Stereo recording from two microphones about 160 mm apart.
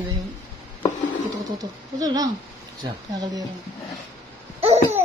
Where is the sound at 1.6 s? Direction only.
25° right (ahead or behind).